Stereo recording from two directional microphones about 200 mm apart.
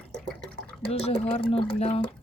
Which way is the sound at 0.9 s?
30° left (ahead or behind).